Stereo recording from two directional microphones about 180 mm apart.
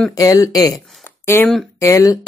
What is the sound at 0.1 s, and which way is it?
Speech, 20° left (ahead or behind).